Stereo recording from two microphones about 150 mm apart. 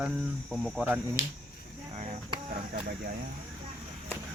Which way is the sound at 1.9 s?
45° right (ahead or behind).